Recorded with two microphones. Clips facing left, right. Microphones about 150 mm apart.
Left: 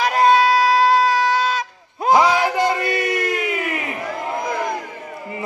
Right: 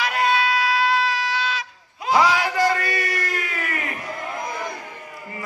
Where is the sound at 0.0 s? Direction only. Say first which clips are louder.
Left 7 dB; 40° left (ahead or behind).